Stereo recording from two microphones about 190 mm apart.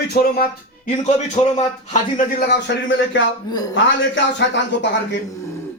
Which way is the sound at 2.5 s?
70° left (ahead or behind).